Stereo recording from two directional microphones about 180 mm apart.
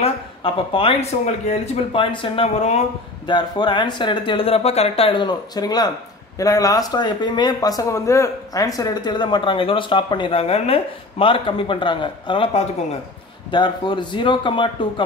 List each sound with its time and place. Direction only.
0.0 s speech: 30° left (ahead or behind)